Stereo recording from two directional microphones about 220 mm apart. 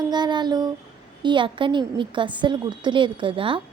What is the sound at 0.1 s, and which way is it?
Speech, 20° right (ahead or behind).